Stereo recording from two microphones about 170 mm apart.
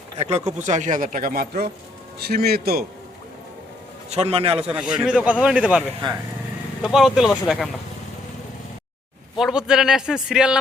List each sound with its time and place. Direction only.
0.2 s speech: 40° right (ahead or behind); by 2.8 s 65° right (ahead or behind)
4.1 s a man's voice: 35° right (ahead or behind)
4.7 s a man's voice: 5° right (ahead or behind)
6.8 s a man's voice: centre (ahead or behind)
9.4 s a man's voice: 5° right (ahead or behind)